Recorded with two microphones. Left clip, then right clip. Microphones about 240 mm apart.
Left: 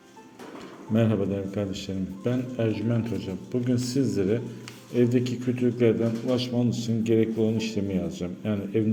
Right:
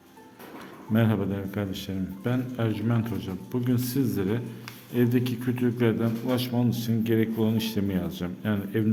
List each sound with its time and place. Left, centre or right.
0.9 s a man's voice: centre